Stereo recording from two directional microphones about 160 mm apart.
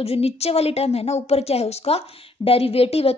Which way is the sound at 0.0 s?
40° left (ahead or behind).